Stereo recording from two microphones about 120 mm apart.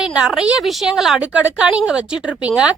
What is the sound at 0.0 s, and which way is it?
A woman's voice, 10° right (ahead or behind).